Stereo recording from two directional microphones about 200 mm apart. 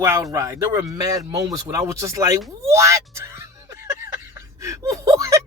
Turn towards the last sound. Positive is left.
turn(degrees=-15)  # may be behind; listen again after turning